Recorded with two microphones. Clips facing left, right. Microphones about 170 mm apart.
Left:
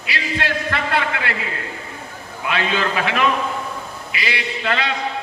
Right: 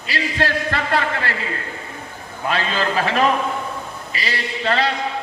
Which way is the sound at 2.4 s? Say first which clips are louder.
Even; 35° right (ahead or behind).